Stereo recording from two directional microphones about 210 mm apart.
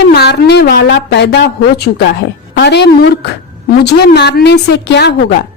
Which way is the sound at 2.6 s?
55° left (ahead or behind).